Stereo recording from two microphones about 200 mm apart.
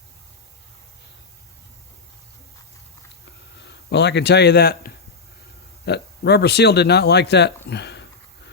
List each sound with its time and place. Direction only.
3.7 s a man's voice: 55° left (ahead or behind)